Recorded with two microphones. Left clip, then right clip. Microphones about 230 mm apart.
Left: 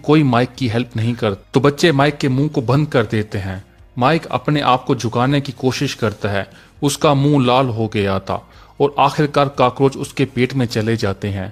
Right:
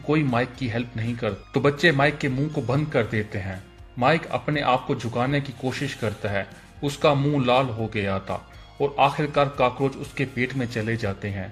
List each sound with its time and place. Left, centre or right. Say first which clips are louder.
0.1 s speech: left 9 dB; left